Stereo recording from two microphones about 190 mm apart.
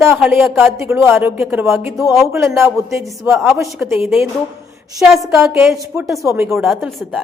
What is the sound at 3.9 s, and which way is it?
Speech, centre (ahead or behind).